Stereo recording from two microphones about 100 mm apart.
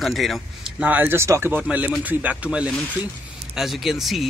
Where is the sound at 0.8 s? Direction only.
20° right (ahead or behind).